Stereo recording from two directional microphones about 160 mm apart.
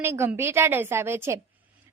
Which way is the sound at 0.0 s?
15° right (ahead or behind).